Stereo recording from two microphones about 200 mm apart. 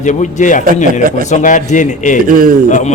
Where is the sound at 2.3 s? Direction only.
45° right (ahead or behind).